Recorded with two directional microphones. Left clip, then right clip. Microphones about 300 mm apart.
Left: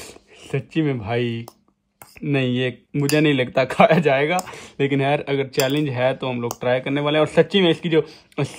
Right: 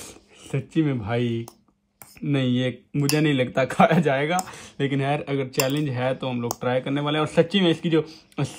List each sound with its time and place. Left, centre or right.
0.5 s speech: left
6.3 s speech: centre
6.6 s speech: left